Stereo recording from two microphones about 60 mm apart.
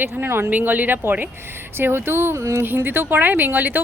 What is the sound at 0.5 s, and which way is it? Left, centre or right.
A woman's voice, right.